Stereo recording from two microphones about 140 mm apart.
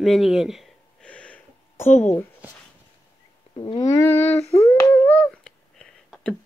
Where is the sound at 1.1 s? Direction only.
10° left (ahead or behind).